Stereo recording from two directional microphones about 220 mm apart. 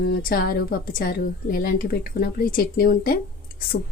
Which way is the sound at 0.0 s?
45° left (ahead or behind).